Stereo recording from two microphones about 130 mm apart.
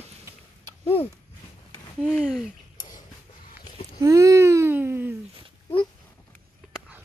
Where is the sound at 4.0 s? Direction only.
25° right (ahead or behind).